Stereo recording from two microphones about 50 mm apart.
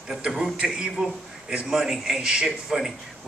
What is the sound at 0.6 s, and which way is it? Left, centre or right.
A man's voice, right.